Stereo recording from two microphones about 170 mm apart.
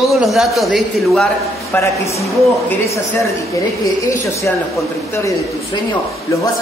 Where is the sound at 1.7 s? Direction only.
15° left (ahead or behind).